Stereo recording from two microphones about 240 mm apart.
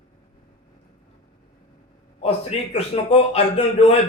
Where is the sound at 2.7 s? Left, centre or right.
Left.